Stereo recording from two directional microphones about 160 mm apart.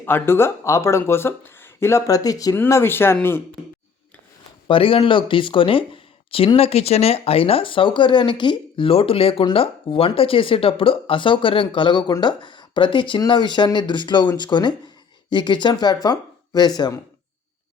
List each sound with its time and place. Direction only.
0.0 s speech: 15° left (ahead or behind)
4.7 s speech: 35° left (ahead or behind)